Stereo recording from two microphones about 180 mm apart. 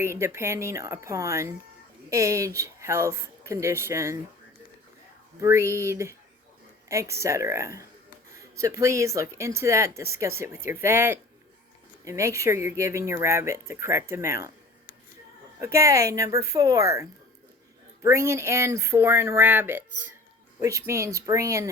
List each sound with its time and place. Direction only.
0.0 s speech: 15° right (ahead or behind)
5.4 s speech: 15° right (ahead or behind)
15.5 s speech: 15° right (ahead or behind)